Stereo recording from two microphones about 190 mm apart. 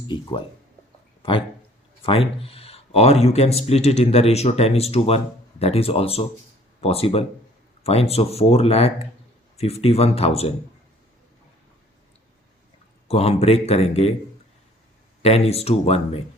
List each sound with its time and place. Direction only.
0.1 s speech: 25° left (ahead or behind)
13.1 s speech: 30° left (ahead or behind)
15.2 s speech: 30° left (ahead or behind)